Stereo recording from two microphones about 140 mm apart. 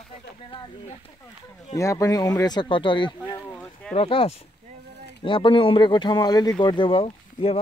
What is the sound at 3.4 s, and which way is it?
Speech, 15° left (ahead or behind).